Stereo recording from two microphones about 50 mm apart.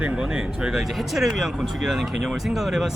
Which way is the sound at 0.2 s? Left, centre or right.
Centre.